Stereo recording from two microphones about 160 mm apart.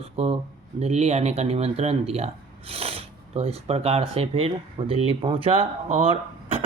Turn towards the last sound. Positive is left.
turn(degrees=-35)  # may be behind; listen again after turning